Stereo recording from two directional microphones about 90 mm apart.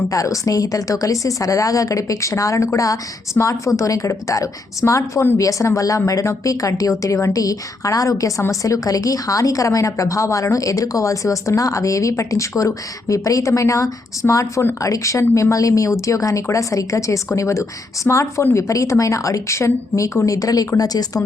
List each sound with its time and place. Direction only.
0.1 s a woman's voice: 40° left (ahead or behind)